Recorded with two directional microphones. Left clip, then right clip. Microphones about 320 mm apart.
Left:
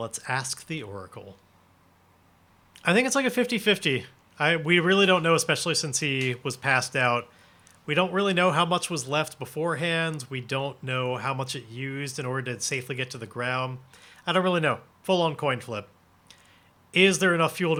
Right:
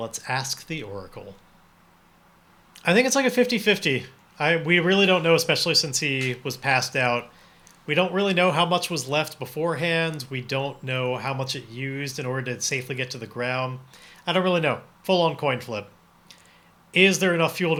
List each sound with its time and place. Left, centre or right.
0.0 s speech: left
2.7 s speech: left
16.9 s speech: left